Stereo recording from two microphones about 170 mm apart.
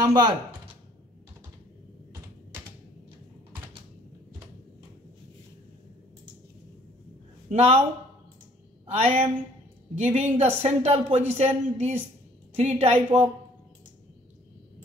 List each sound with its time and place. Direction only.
0.0 s speech: 25° right (ahead or behind)
7.4 s speech: 40° right (ahead or behind)
8.9 s speech: 35° right (ahead or behind)